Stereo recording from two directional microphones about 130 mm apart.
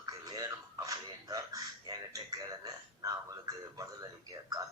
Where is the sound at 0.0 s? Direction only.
30° right (ahead or behind).